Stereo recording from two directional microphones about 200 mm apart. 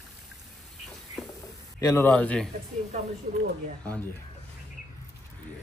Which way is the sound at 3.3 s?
40° right (ahead or behind).